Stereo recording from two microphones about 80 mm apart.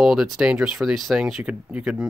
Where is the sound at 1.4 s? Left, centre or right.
Centre.